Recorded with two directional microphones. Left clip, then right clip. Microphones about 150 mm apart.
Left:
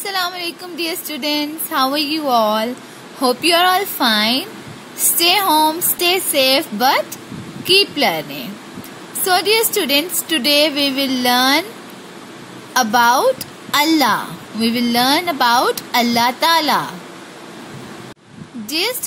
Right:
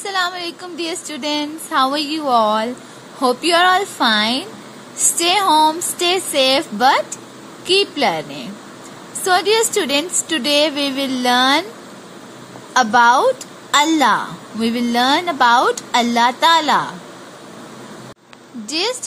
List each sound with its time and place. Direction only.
0.0 s a woman's voice: 15° left (ahead or behind)
12.9 s a woman's voice: 20° left (ahead or behind)
18.7 s a woman's voice: 15° left (ahead or behind)